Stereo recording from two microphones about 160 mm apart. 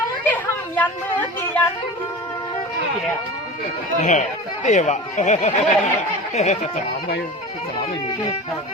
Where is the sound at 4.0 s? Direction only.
50° left (ahead or behind).